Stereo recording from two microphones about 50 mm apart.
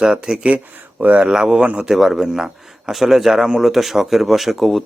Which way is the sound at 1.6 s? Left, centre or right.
Right.